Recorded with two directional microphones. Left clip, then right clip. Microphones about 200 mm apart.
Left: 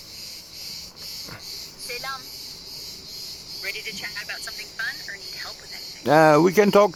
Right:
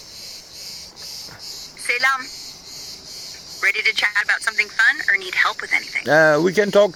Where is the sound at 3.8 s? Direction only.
35° right (ahead or behind).